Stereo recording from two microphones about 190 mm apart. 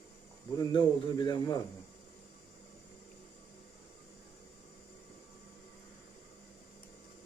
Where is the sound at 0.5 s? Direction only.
25° left (ahead or behind).